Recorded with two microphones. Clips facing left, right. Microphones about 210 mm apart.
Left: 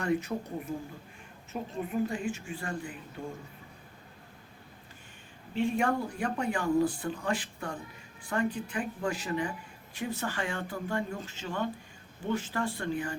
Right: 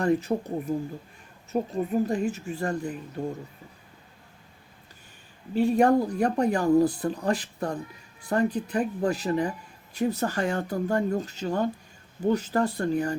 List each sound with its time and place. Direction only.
0.0 s speech: 35° right (ahead or behind)
5.5 s speech: 40° right (ahead or behind)